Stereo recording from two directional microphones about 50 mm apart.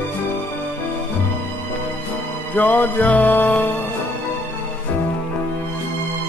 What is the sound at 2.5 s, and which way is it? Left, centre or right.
Music, left.